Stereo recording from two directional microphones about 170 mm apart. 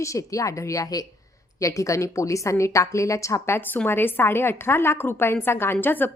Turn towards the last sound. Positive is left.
turn(degrees=10)  # may be behind; listen again after turning